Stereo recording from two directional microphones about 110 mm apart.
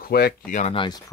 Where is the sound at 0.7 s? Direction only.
45° left (ahead or behind).